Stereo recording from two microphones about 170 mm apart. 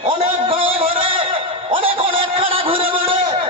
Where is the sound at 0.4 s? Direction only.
30° right (ahead or behind).